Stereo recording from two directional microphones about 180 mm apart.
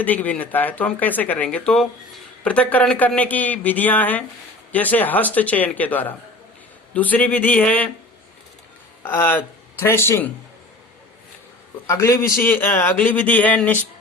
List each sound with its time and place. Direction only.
0.0 s speech: 10° left (ahead or behind)
9.0 s speech: 10° left (ahead or behind)
11.9 s speech: 15° left (ahead or behind)